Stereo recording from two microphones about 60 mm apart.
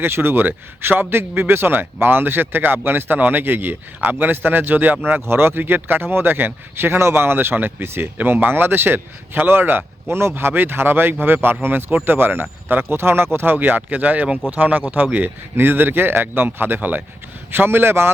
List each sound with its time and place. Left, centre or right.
0.0 s speech: right
5.2 s speech: right